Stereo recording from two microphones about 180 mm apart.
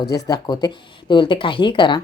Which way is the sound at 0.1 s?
20° left (ahead or behind).